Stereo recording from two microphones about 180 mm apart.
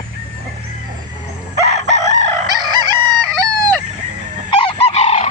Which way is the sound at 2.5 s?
25° right (ahead or behind).